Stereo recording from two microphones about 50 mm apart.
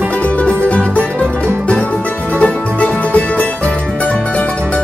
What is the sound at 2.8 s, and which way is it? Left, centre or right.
Music, left.